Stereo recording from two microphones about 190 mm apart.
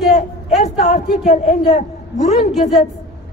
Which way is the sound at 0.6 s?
45° left (ahead or behind).